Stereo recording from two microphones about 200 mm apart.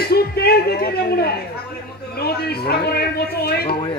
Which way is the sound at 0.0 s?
50° left (ahead or behind).